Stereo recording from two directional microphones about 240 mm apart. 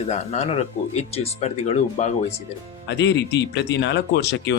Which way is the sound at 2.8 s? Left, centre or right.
Left.